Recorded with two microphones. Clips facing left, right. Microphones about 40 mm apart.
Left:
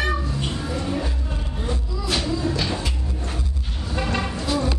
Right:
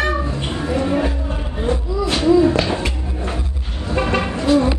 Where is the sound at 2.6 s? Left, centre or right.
Right.